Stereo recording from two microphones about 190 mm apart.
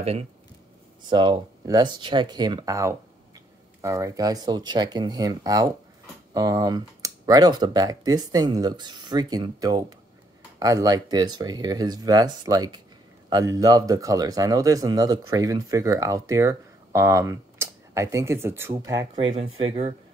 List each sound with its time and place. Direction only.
0.0 s speech: 30° right (ahead or behind)
19.3 s speech: 30° right (ahead or behind)